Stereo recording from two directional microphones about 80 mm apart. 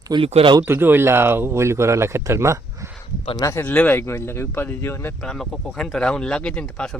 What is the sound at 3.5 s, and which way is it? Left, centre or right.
Speech, left.